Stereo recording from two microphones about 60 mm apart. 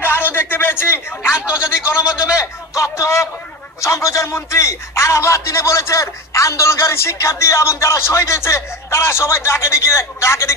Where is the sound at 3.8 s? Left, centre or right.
Left.